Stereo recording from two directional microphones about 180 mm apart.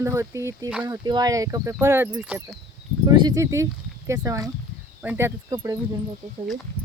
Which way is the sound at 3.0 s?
20° right (ahead or behind).